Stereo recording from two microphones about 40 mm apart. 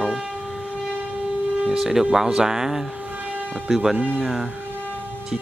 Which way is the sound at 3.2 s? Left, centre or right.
Right.